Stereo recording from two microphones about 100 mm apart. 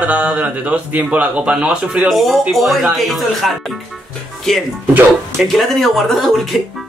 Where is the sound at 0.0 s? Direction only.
15° right (ahead or behind).